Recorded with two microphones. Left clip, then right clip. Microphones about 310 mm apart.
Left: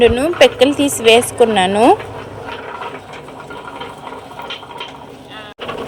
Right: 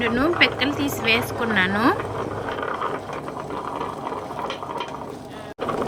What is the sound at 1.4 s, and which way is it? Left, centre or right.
Speech, centre.